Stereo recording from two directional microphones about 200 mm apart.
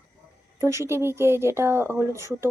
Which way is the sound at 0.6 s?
15° right (ahead or behind).